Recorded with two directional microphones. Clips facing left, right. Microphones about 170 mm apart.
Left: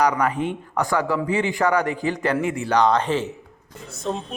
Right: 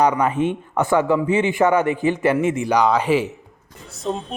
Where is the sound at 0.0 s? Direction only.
25° right (ahead or behind).